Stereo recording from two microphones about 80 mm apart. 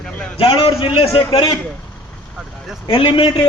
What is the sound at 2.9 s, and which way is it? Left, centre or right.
Speech, left.